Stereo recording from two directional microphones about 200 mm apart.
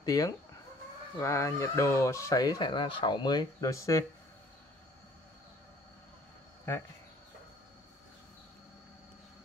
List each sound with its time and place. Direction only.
0.0 s speech: 20° left (ahead or behind)